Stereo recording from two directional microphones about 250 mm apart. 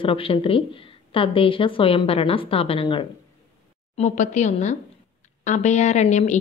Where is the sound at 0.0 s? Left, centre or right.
Left.